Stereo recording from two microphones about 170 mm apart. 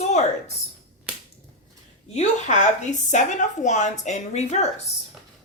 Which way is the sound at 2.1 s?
40° left (ahead or behind).